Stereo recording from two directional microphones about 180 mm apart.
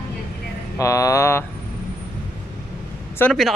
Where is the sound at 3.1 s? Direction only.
5° left (ahead or behind).